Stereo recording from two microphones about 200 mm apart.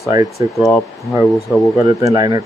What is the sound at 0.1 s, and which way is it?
Speech, 20° right (ahead or behind).